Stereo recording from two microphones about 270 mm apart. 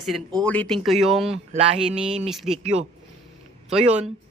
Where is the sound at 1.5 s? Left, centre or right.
Right.